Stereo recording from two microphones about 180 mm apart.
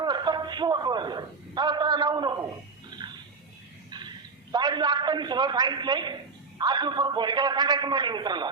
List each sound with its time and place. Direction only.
0.0 s a man's voice: 25° right (ahead or behind)
3.0 s a sound: 25° right (ahead or behind)
4.5 s a man's voice: 25° right (ahead or behind)